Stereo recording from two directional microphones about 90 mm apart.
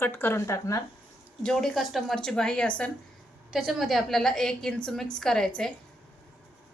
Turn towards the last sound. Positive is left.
turn(degrees=5)  # may be behind; listen again after turning